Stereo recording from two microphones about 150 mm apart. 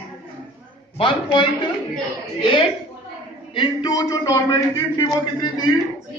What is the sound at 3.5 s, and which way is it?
A man's voice, 30° left (ahead or behind).